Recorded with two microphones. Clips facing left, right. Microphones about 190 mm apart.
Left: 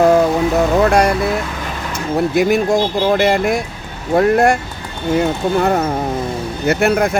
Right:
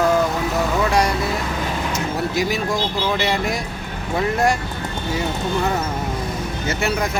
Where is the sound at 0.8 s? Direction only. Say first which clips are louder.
Left 6 dB; 55° left (ahead or behind).